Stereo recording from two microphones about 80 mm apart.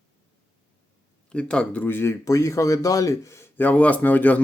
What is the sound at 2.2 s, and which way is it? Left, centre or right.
Speech, left.